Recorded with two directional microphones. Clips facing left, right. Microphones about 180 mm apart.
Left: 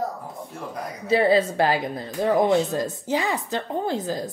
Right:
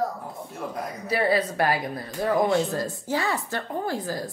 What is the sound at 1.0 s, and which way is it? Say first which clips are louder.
Speech: left 5 dB; 25° left (ahead or behind).